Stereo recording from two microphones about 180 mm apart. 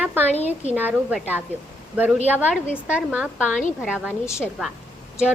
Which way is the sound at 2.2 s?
10° right (ahead or behind).